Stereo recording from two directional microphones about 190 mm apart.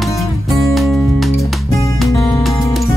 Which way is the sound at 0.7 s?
Centre (ahead or behind).